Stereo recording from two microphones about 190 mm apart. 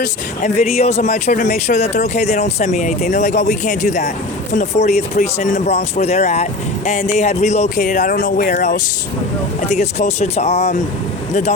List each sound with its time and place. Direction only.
0.4 s speech: 35° left (ahead or behind)